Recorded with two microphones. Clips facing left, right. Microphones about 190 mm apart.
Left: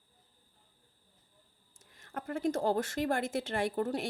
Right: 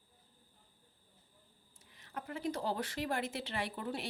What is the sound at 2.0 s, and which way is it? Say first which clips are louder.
A woman's voice: left 6 dB; 50° left (ahead or behind).